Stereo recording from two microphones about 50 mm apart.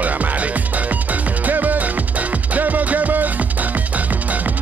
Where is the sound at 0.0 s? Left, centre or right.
Right.